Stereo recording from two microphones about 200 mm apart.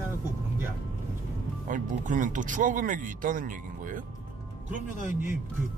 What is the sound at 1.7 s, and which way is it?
Speech, 40° right (ahead or behind).